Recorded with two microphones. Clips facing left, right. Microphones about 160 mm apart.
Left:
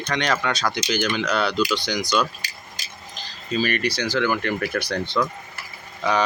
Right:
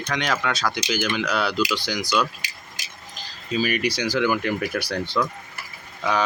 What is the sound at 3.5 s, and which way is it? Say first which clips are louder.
Speech: even; 5° right (ahead or behind).